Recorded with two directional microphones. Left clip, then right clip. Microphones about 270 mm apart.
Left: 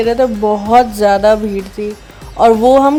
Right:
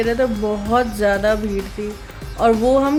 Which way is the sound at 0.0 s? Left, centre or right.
Centre.